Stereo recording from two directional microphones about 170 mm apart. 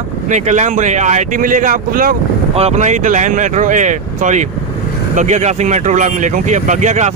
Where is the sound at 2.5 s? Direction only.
40° right (ahead or behind).